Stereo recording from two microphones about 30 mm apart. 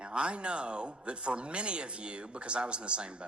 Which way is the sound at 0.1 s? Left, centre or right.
Right.